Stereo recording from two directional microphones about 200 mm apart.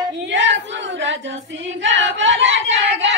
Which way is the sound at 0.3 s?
65° right (ahead or behind).